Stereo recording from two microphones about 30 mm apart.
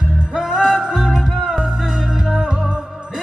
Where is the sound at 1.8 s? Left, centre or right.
Centre.